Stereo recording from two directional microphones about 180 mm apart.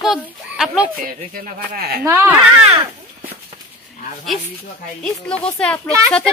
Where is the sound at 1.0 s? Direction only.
50° right (ahead or behind).